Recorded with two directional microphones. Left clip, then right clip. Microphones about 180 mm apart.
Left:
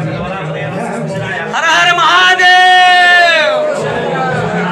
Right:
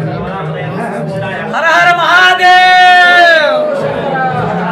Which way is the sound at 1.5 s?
5° right (ahead or behind).